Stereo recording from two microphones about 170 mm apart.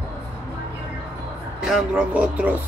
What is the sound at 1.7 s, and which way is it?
Speech, 5° right (ahead or behind).